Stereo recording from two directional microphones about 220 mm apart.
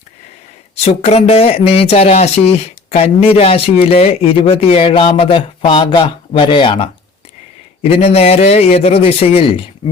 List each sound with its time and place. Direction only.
0.8 s speech: 30° left (ahead or behind)